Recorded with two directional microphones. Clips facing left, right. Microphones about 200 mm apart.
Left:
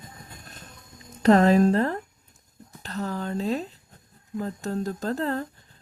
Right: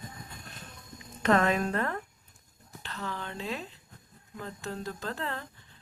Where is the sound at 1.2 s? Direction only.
35° left (ahead or behind).